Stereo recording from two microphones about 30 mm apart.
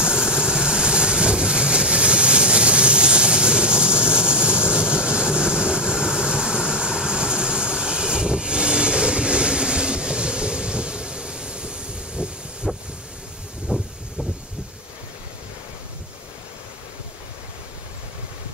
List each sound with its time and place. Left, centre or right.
0.0 s vehicle: right